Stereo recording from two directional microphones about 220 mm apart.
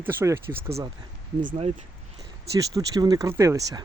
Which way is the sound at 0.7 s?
25° right (ahead or behind).